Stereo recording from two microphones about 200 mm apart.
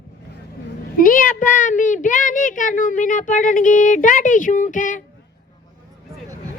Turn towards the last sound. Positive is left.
turn(degrees=40)  # may be behind; listen again after turning